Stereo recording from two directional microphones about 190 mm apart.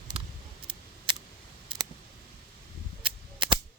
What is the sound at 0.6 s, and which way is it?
Scissors, 25° right (ahead or behind).